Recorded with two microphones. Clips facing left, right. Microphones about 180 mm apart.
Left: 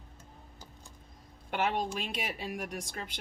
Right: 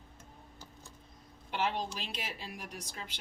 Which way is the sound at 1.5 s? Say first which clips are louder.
Left 3 dB; 55° left (ahead or behind).